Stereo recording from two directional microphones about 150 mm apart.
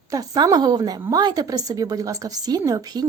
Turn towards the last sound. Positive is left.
turn(degrees=-25)  # may be behind; listen again after turning